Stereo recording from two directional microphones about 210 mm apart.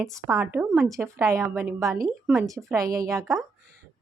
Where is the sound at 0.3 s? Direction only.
10° right (ahead or behind).